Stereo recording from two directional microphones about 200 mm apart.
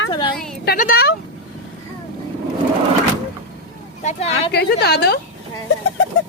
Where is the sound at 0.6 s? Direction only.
45° left (ahead or behind).